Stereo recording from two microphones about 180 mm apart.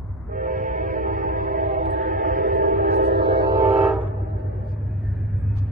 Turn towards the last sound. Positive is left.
turn(degrees=0)  # may be behind; listen again after turning